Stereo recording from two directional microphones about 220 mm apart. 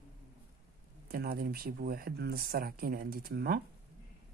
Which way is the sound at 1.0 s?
45° right (ahead or behind).